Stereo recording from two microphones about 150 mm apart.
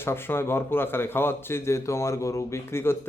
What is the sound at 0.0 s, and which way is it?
A man's voice, 15° left (ahead or behind).